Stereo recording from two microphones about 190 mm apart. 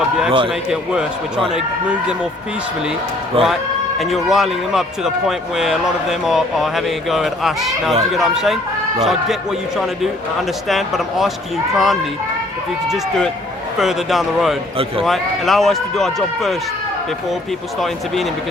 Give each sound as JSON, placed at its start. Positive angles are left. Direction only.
{"t": 0.3, "sound": "a man's voice", "side_deg": -30}
{"t": 0.7, "sound": "speech", "side_deg": 0}
{"t": 3.4, "sound": "speech", "side_deg": 0}
{"t": 17.7, "sound": "speech", "side_deg": 0}